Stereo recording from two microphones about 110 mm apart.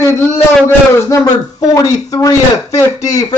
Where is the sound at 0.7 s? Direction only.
25° left (ahead or behind).